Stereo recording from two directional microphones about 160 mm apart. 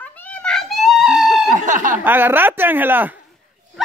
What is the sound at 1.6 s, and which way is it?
Speech, 50° right (ahead or behind).